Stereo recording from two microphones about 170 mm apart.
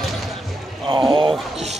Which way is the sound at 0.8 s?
30° right (ahead or behind).